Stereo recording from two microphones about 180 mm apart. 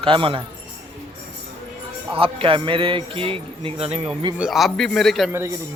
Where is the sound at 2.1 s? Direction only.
30° right (ahead or behind).